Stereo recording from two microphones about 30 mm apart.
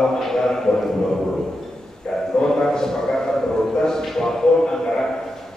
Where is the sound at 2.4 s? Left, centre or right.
Centre.